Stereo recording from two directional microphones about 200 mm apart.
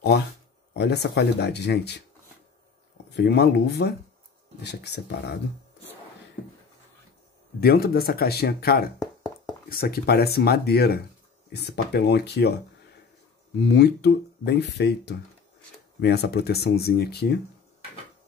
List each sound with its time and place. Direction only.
0.7 s speech: 55° left (ahead or behind)
3.2 s speech: 55° left (ahead or behind)
7.6 s speech: 50° left (ahead or behind)
13.6 s speech: 55° left (ahead or behind)